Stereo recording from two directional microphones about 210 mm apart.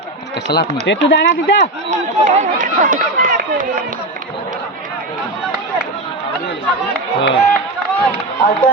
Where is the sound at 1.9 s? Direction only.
35° right (ahead or behind).